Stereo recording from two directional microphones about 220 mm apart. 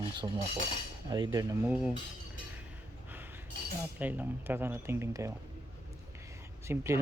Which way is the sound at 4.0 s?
5° right (ahead or behind).